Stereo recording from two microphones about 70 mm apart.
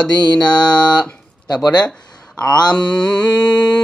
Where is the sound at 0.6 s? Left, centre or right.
Left.